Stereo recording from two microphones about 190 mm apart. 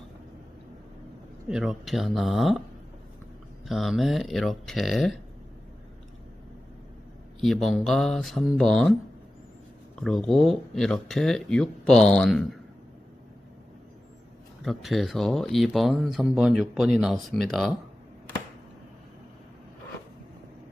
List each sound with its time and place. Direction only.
1.5 s speech: centre (ahead or behind)
3.7 s speech: centre (ahead or behind)
7.4 s speech: centre (ahead or behind)
14.6 s speech: centre (ahead or behind)